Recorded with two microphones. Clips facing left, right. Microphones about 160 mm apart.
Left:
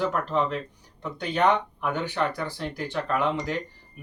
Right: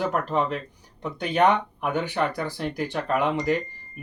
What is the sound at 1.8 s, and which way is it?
Speech, 15° right (ahead or behind).